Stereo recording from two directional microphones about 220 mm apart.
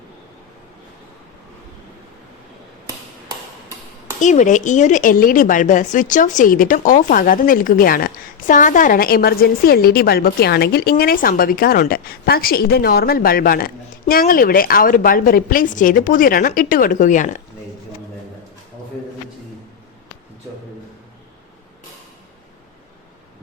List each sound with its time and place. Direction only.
2.8 s hammer: 15° right (ahead or behind)
4.2 s speech: 35° left (ahead or behind)